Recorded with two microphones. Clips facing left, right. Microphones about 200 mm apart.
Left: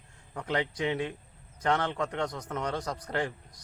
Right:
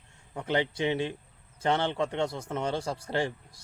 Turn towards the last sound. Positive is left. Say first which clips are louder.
# right 2 dB
turn(degrees=-30)  # may be behind; listen again after turning